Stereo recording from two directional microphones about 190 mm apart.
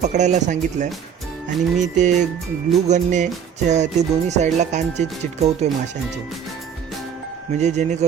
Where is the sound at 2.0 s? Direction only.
40° right (ahead or behind).